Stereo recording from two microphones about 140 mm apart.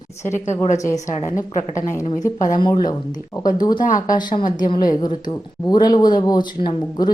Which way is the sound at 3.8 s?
70° left (ahead or behind).